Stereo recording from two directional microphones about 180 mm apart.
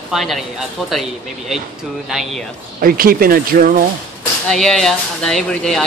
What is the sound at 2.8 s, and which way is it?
Speech, 55° right (ahead or behind).